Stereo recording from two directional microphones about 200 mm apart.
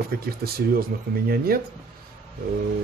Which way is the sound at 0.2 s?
50° right (ahead or behind).